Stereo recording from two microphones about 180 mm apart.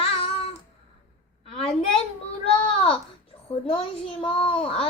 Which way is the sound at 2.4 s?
30° left (ahead or behind).